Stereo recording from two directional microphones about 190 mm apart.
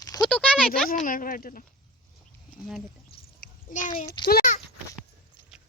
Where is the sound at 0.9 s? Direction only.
45° left (ahead or behind).